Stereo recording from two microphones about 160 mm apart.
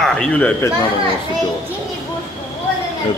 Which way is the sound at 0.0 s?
5° left (ahead or behind).